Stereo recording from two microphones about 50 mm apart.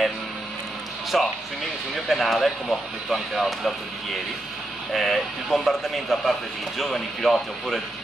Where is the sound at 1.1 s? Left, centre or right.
Centre.